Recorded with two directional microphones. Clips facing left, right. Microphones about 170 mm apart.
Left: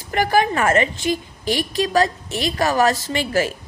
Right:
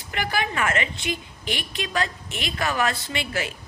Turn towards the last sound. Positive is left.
turn(degrees=40)  # may be behind; listen again after turning